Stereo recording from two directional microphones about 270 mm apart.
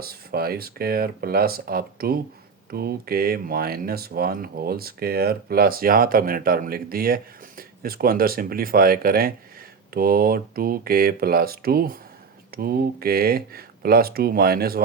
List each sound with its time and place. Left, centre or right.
0.0 s speech: right